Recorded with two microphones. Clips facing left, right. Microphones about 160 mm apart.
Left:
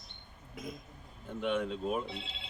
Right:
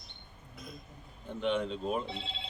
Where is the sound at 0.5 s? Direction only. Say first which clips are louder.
Left 5 dB; 90° left.